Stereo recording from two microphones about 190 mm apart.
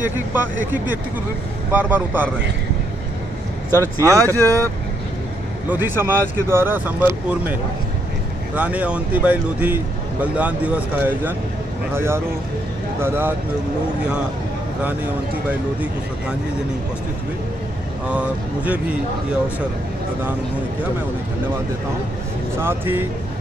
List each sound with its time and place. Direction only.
0.0 s speech: 10° right (ahead or behind)
4.0 s speech: 15° right (ahead or behind)
5.7 s speech: 10° right (ahead or behind)
8.5 s speech: 5° right (ahead or behind)
18.1 s speech: 5° right (ahead or behind)
22.6 s speech: 10° right (ahead or behind)